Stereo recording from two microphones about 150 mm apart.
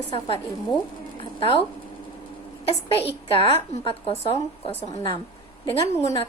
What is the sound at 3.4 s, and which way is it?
Speech, 40° left (ahead or behind).